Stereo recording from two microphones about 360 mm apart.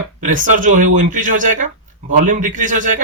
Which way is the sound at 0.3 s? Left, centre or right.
Right.